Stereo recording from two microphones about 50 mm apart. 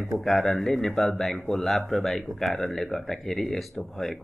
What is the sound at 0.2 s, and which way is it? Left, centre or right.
Speech, centre.